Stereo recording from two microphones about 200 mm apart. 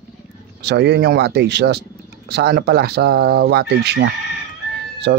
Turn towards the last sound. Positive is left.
turn(degrees=-55)  # may be behind; listen again after turning